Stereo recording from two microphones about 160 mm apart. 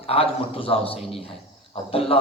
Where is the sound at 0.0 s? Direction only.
35° left (ahead or behind).